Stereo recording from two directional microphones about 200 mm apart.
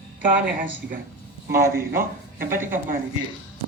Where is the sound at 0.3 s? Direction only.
10° right (ahead or behind).